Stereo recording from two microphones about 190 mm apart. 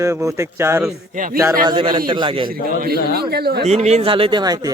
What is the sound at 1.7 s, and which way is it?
Speech, 25° right (ahead or behind).